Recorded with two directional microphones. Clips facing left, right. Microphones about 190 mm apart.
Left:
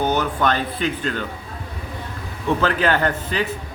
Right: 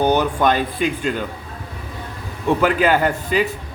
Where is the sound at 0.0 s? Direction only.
15° right (ahead or behind).